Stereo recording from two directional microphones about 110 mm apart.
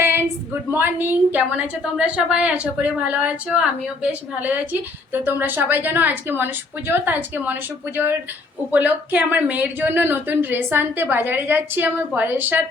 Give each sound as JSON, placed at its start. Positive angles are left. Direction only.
{"t": 0.7, "sound": "a woman's voice", "side_deg": -20}